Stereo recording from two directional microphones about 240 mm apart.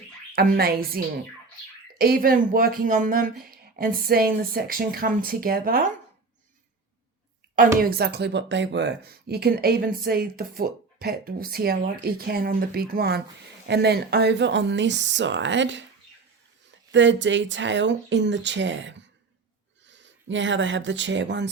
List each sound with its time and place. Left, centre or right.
0.3 s speech: right
7.8 s speech: right
16.9 s speech: right